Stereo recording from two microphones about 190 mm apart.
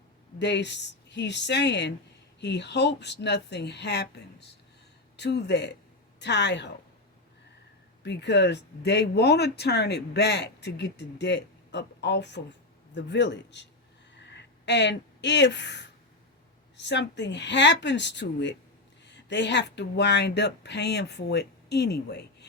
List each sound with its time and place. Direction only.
0.3 s speech: 65° left (ahead or behind)
8.0 s a woman's voice: 65° left (ahead or behind)
14.2 s a sound: 65° left (ahead or behind)
16.7 s a woman's voice: 65° left (ahead or behind)